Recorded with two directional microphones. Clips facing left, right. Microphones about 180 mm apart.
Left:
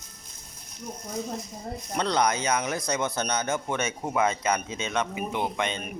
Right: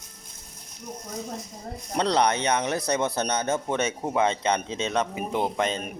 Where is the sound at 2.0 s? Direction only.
30° right (ahead or behind).